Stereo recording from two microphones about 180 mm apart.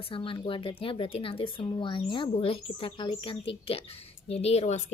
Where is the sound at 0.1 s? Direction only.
30° left (ahead or behind).